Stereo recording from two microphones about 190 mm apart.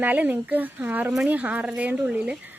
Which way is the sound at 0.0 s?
10° right (ahead or behind).